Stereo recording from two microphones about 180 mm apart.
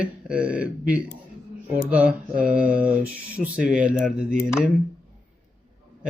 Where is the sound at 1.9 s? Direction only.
5° right (ahead or behind).